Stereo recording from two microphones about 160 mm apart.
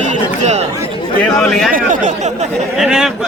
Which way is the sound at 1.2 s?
5° left (ahead or behind).